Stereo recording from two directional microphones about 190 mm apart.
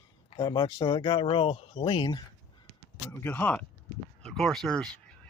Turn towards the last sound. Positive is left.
turn(degrees=0)  # may be behind; listen again after turning